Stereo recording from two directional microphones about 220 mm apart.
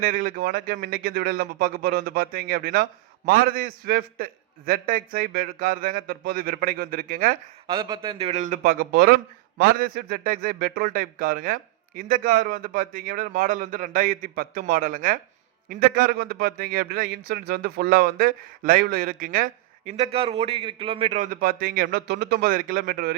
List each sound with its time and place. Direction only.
0.0 s a man's voice: 40° right (ahead or behind)
7.7 s a man's voice: 15° right (ahead or behind); by 23.1 s 40° right (ahead or behind)